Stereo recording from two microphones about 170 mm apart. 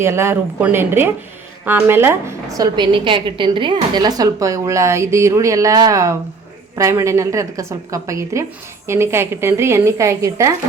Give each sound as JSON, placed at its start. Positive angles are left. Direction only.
{"t": 0.0, "sound": "a woman's voice", "side_deg": -15}